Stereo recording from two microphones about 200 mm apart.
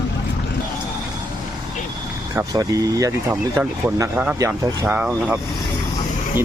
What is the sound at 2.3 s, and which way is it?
Speech, 15° right (ahead or behind).